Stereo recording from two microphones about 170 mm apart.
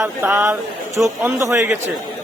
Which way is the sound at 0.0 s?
15° right (ahead or behind).